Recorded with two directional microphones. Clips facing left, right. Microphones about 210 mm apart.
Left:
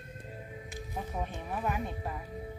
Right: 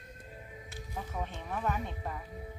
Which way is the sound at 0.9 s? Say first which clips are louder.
Left 2 dB; 15° left (ahead or behind).